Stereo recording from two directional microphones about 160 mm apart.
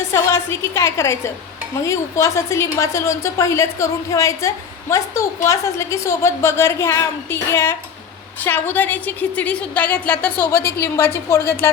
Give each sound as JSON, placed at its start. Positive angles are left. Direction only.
{"t": 0.1, "sound": "a woman's voice", "side_deg": 15}